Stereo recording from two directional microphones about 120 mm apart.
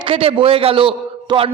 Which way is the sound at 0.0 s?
50° right (ahead or behind).